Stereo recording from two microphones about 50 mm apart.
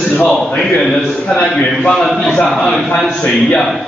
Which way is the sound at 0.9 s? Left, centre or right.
Centre.